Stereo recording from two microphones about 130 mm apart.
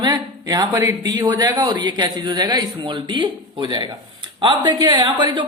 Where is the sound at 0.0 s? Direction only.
30° right (ahead or behind).